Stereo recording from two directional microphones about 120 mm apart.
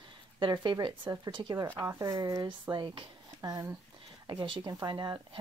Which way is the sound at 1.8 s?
30° right (ahead or behind).